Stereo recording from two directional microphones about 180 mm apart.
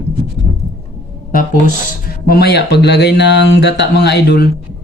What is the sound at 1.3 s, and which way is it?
Speech, 50° left (ahead or behind).